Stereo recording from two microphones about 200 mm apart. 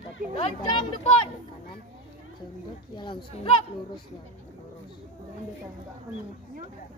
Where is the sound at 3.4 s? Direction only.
25° left (ahead or behind).